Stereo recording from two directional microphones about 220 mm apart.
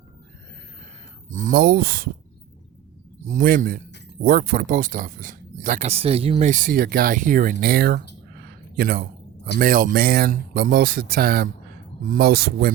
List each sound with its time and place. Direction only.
1.3 s speech: 35° right (ahead or behind)
3.2 s a man's voice: 40° right (ahead or behind)